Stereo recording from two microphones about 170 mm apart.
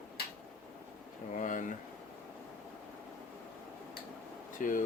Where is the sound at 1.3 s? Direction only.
50° left (ahead or behind).